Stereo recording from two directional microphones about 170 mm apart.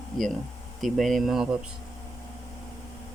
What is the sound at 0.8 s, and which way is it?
Speech, centre (ahead or behind).